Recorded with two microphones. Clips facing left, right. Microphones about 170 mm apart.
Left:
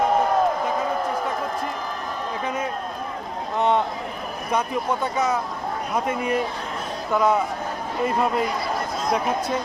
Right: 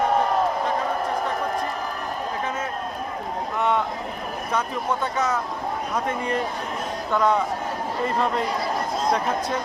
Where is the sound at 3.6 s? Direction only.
25° left (ahead or behind).